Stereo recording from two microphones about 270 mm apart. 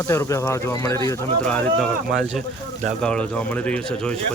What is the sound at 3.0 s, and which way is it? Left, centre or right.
Speech, centre.